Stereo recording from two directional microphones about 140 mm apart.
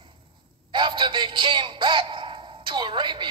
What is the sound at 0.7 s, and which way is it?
Music, 35° right (ahead or behind).